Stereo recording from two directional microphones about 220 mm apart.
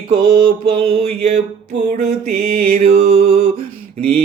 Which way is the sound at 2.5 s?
35° right (ahead or behind).